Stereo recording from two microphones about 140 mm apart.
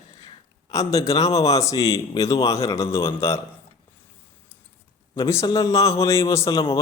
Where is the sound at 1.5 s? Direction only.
25° left (ahead or behind).